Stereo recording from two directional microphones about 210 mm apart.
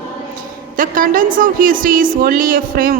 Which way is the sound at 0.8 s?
40° right (ahead or behind).